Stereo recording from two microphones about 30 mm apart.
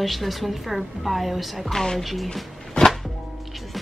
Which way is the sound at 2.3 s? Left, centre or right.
Centre.